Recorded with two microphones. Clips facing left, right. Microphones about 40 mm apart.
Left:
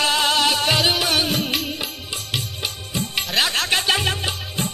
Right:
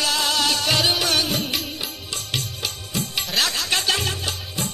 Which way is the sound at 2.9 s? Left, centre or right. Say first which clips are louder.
Left 2 dB; left.